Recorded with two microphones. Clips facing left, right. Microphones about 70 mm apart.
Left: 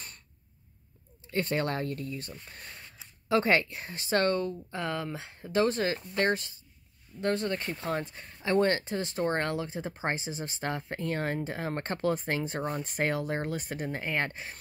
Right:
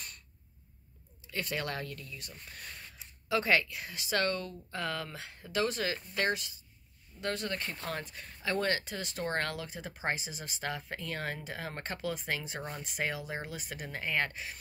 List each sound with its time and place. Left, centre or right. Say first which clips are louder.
1.2 s speech: left 7 dB; left